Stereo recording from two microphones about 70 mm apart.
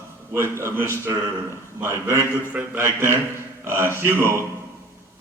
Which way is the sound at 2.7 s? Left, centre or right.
Right.